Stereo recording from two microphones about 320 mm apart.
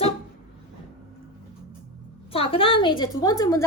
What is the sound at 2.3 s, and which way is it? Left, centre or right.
A woman's voice, centre.